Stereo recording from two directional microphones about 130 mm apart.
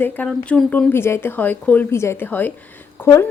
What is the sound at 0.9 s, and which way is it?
Speech, 20° left (ahead or behind).